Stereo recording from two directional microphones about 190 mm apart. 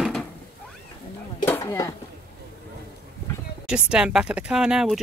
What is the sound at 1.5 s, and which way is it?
Speech, 15° left (ahead or behind).